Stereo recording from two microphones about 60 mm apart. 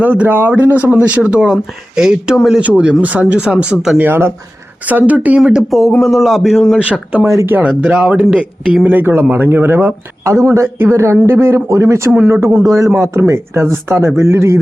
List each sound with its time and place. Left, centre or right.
0.0 s speech: right; by 2.6 s centre
2.6 s speech: centre
3.9 s speech: right
6.0 s a man's voice: centre
6.7 s speech: centre
8.9 s speech: right
10.2 s speech: right
12.6 s a man's voice: right
13.0 s speech: right